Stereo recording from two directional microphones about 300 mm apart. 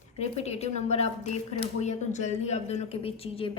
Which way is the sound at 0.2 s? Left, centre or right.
Left.